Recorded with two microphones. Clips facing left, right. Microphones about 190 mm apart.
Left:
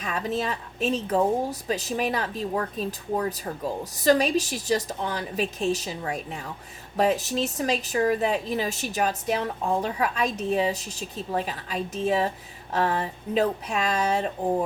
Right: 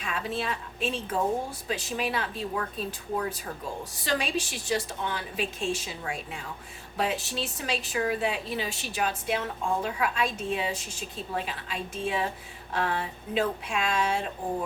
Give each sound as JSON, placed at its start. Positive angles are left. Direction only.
{"t": 0.0, "sound": "a woman's voice", "side_deg": 40}